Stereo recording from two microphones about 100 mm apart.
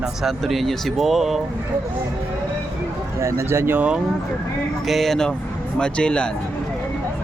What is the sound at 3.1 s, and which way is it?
Speech, 30° right (ahead or behind).